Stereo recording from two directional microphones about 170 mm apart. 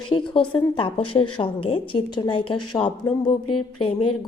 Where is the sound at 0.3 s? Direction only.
30° left (ahead or behind).